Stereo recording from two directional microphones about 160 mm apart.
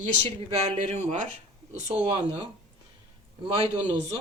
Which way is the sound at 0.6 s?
45° right (ahead or behind).